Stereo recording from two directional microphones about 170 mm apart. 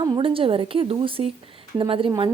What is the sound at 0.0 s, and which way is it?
A woman's voice, 25° right (ahead or behind).